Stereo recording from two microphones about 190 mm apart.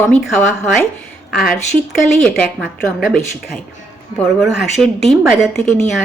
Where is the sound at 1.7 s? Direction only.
25° right (ahead or behind).